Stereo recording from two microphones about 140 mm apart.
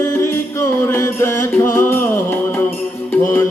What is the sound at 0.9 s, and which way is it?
Music, 20° left (ahead or behind).